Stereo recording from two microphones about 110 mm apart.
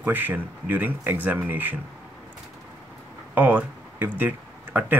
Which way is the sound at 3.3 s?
15° right (ahead or behind).